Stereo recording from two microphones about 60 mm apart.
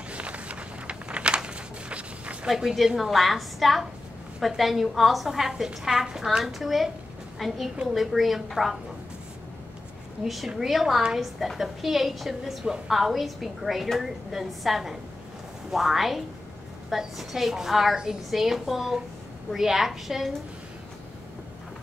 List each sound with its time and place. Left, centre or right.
0.1 s a sound: right
2.4 s a woman's voice: centre
10.2 s a woman's voice: centre